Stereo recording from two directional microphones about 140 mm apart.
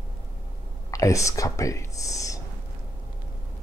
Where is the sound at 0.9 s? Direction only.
25° left (ahead or behind).